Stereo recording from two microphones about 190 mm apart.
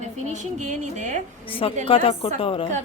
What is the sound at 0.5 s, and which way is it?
Speech, 40° right (ahead or behind).